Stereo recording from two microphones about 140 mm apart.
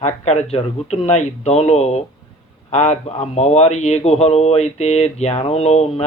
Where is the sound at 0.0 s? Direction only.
50° left (ahead or behind).